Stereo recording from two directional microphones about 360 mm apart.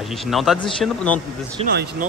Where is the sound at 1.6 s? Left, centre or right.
Centre.